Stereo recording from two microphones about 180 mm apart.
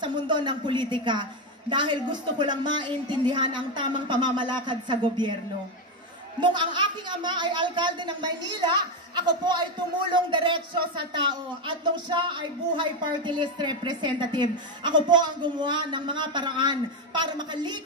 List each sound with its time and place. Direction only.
0.0 s speech: 25° right (ahead or behind)
6.4 s speech: 25° right (ahead or behind)